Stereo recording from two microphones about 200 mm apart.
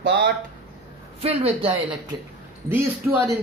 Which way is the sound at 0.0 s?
60° right (ahead or behind).